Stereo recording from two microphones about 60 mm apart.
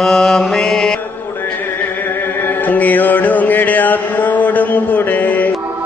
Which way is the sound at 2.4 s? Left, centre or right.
Left.